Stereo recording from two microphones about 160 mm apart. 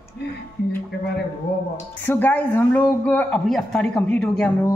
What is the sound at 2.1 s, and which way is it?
A woman's voice, 10° left (ahead or behind).